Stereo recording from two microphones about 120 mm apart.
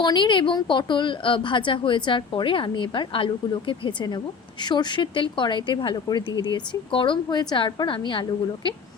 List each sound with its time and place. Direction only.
0.0 s a woman's voice: 40° left (ahead or behind)